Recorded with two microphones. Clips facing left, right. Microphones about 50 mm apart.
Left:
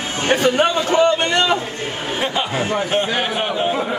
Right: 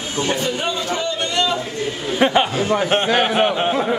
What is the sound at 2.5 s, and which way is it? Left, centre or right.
Speech, left.